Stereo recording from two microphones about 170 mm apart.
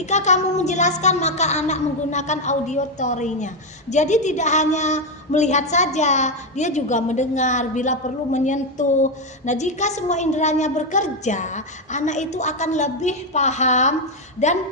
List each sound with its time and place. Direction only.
0.0 s a woman's voice: 45° left (ahead or behind)